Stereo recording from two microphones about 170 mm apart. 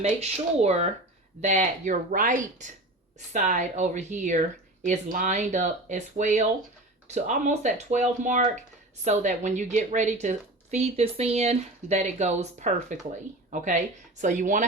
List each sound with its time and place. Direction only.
0.2 s a woman's voice: 40° right (ahead or behind)